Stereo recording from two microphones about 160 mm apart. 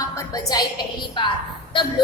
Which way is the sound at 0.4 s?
25° left (ahead or behind).